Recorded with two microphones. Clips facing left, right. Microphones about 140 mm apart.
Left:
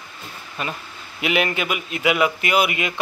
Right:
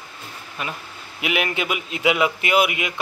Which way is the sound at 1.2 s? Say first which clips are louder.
Left 2 dB; 10° right (ahead or behind).